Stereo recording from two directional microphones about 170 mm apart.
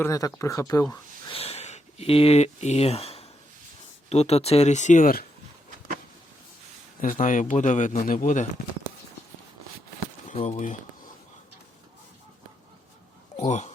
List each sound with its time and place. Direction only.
0.0 s speech: 20° left (ahead or behind)
1.3 s a sound: 35° left (ahead or behind)
4.1 s speech: 40° left (ahead or behind)
7.0 s a man's voice: 50° left (ahead or behind)
10.2 s speech: 40° left (ahead or behind)
13.4 s speech: 45° left (ahead or behind)